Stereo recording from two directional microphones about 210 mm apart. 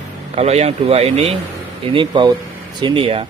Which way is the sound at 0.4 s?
30° right (ahead or behind).